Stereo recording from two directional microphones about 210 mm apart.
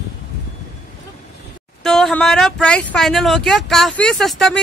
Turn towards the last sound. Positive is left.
turn(degrees=0)  # may be behind; listen again after turning